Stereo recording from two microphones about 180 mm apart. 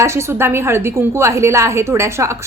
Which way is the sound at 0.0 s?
15° right (ahead or behind).